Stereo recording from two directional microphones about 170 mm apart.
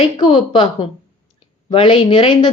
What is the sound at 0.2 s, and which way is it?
A woman's voice, 30° left (ahead or behind).